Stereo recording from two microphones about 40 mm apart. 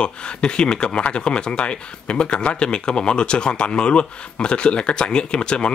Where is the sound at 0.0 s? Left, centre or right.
Left.